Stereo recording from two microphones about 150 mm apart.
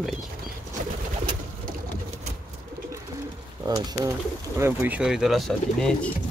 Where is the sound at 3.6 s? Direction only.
25° right (ahead or behind).